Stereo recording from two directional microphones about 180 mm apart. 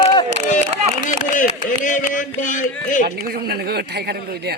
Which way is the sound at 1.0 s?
45° left (ahead or behind).